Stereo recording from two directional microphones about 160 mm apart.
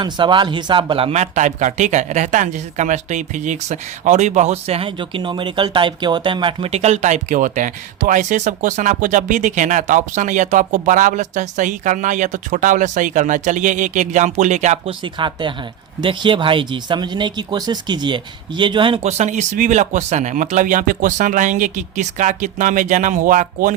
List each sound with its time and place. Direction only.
0.0 s speech: 30° right (ahead or behind); by 14.8 s 45° right (ahead or behind)
14.8 s speech: 30° right (ahead or behind)
19.0 s speech: 45° right (ahead or behind)